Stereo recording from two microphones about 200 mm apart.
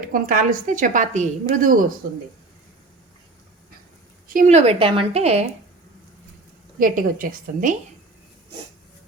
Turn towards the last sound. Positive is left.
turn(degrees=-40)  # may be behind; listen again after turning